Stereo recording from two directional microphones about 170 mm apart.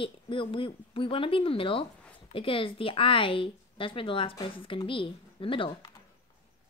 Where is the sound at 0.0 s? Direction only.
30° left (ahead or behind).